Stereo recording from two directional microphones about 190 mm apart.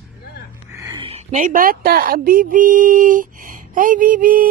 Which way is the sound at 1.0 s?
35° right (ahead or behind).